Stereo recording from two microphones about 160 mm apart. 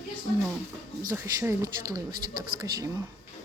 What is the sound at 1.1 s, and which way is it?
Speech, 20° right (ahead or behind).